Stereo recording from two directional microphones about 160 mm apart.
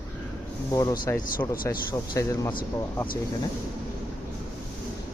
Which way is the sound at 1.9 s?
20° left (ahead or behind).